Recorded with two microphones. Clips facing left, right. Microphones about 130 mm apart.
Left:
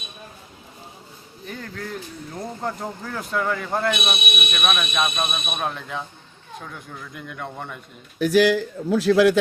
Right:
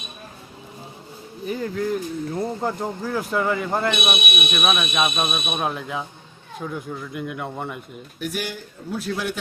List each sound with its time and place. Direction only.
1.5 s speech: 10° right (ahead or behind)
8.2 s a man's voice: 90° left